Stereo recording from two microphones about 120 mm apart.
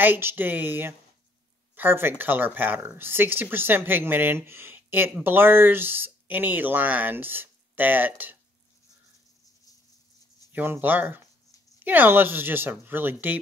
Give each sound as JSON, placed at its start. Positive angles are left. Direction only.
{"t": 0.0, "sound": "speech", "side_deg": -20}
{"t": 10.5, "sound": "speech", "side_deg": -15}